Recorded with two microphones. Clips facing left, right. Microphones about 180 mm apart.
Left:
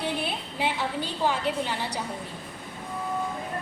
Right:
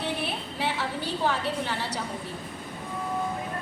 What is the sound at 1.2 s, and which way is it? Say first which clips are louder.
Speech: left 2 dB; 15° left (ahead or behind).